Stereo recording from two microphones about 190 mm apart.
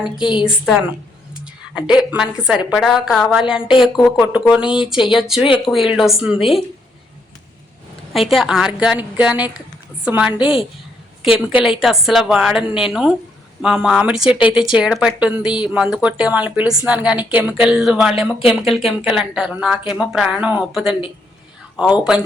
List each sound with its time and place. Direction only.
0.2 s a woman's voice: 25° left (ahead or behind)
0.4 s speech: 5° right (ahead or behind)
8.1 s speech: centre (ahead or behind)
11.6 s speech: centre (ahead or behind)